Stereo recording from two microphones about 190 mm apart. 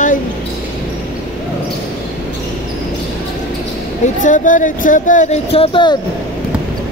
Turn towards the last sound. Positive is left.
turn(degrees=25)  # may be behind; listen again after turning